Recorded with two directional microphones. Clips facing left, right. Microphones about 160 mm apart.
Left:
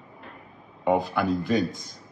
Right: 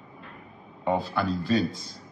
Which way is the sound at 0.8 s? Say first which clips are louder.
Left 3 dB; 15° left (ahead or behind).